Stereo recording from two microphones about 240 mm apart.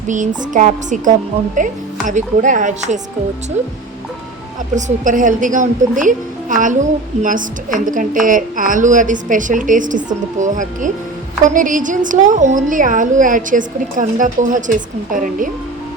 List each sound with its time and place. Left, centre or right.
0.1 s a woman's voice: right
4.7 s a woman's voice: right